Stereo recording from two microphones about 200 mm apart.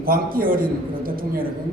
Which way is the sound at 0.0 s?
45° right (ahead or behind).